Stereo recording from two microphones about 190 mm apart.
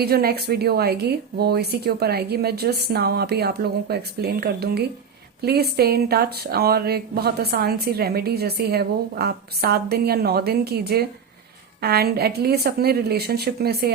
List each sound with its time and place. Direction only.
0.0 s speech: 55° right (ahead or behind)